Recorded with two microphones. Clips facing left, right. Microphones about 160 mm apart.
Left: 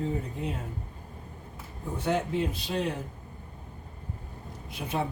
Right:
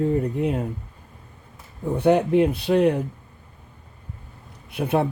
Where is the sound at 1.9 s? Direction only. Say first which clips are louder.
Right 10 dB; 60° right (ahead or behind).